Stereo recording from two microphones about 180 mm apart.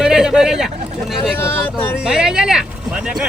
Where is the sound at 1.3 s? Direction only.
10° left (ahead or behind).